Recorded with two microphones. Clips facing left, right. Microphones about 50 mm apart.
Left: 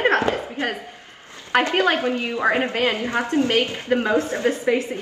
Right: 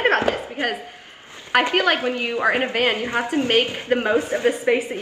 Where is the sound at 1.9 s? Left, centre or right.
Centre.